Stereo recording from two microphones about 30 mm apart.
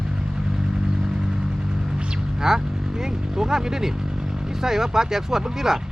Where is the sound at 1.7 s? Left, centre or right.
Right.